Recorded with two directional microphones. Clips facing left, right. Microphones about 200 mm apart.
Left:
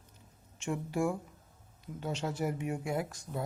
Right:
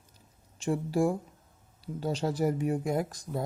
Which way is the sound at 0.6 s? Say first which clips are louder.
Right 5 dB; 35° right (ahead or behind).